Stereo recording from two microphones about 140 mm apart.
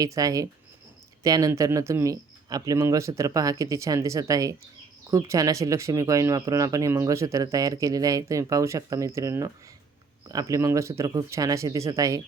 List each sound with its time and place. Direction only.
0.0 s speech: 25° right (ahead or behind)